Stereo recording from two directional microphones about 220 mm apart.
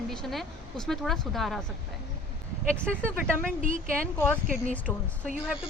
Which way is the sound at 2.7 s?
5° left (ahead or behind).